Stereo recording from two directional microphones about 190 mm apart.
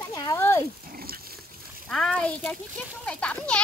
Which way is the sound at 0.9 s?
50° right (ahead or behind).